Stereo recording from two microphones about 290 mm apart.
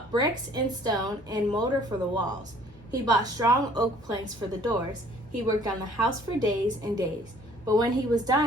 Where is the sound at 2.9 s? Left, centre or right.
Centre.